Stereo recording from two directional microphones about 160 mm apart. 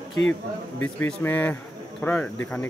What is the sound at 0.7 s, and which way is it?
Speech, 10° left (ahead or behind).